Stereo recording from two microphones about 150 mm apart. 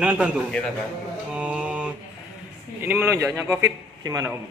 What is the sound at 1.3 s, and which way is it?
Mantra, 5° right (ahead or behind).